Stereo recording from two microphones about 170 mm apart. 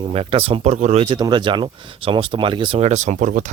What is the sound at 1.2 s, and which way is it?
Speech, 25° right (ahead or behind).